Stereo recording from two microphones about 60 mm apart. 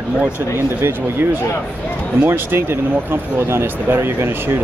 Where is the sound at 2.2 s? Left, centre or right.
Right.